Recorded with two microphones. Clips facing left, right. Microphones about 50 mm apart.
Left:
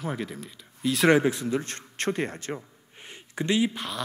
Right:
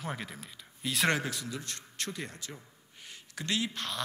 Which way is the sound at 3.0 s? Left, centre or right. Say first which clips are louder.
Left 9 dB; left.